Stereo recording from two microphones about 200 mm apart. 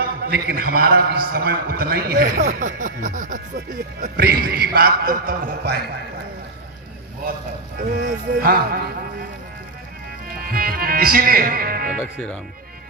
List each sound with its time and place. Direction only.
0.0 s a man's voice: 50° right (ahead or behind)
7.8 s a man's voice: 50° right (ahead or behind)
10.3 s speech: 45° right (ahead or behind)
11.9 s speech: 5° left (ahead or behind)